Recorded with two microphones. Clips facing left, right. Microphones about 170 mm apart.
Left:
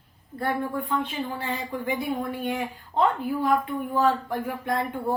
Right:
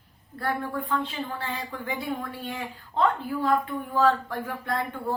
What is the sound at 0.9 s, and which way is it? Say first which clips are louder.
Speech: left 1 dB; 15° left (ahead or behind).